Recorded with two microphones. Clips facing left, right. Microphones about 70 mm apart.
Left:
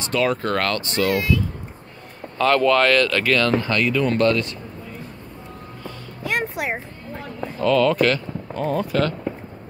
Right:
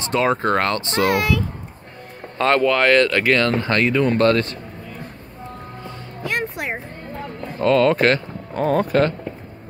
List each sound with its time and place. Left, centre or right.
0.0 s speech: right
1.0 s a child's voice: right
2.3 s speech: right
2.6 s speech: centre; by 4.6 s right
6.3 s music: centre
7.6 s speech: right